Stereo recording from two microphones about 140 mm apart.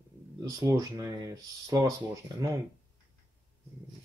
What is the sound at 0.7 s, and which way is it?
Speech, 25° right (ahead or behind).